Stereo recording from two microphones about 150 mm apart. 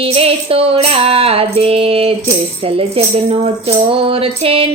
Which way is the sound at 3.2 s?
40° right (ahead or behind).